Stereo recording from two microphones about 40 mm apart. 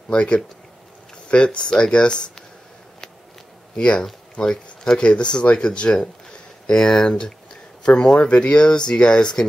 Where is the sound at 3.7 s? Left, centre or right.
Left.